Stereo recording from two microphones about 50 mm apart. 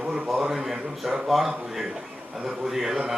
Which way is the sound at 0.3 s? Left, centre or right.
Centre.